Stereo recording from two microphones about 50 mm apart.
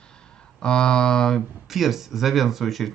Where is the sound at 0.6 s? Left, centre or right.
Centre.